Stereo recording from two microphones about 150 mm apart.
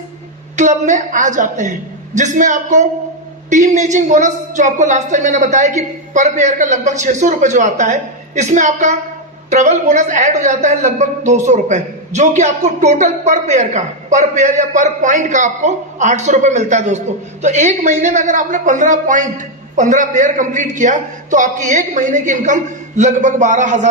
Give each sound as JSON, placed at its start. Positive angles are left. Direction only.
{"t": 0.5, "sound": "a man's voice", "side_deg": -50}